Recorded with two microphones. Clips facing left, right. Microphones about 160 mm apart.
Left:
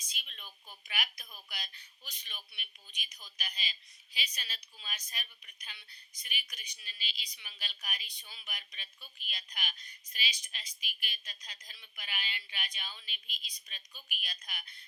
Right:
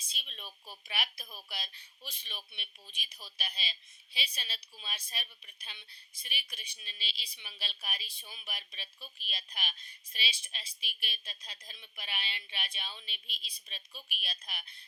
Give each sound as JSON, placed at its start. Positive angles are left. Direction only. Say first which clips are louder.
{"t": 0.0, "sound": "speech", "louder": "right 2 dB", "side_deg": -30}